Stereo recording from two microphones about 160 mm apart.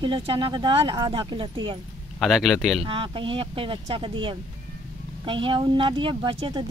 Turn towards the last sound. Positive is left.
turn(degrees=-30)  # may be behind; listen again after turning